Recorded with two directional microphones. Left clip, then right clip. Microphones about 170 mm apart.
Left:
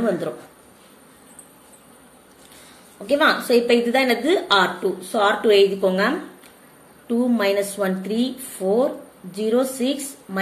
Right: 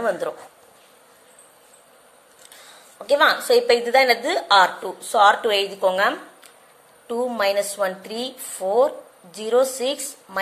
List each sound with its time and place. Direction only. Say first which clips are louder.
3.1 s a woman's voice: right 1 dB; 40° right (ahead or behind)